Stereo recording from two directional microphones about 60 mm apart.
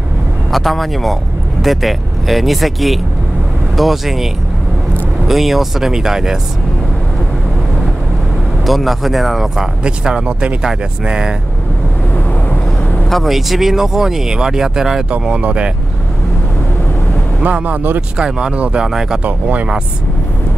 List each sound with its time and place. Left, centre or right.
0.5 s speech: centre
8.6 s speech: centre
13.1 s speech: centre
17.4 s speech: right
18.1 s speech: centre
19.2 s speech: right